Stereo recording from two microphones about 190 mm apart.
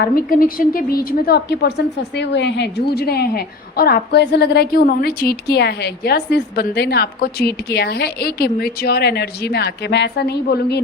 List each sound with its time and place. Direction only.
0.0 s a woman's voice: 50° left (ahead or behind)